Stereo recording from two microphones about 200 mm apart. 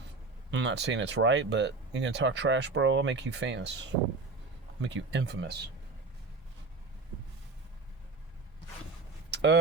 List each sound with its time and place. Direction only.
0.5 s speech: 60° right (ahead or behind)
9.3 s vehicle: 60° right (ahead or behind)